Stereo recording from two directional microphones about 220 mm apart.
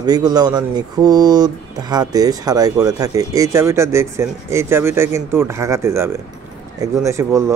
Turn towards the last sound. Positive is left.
turn(degrees=-15)  # may be behind; listen again after turning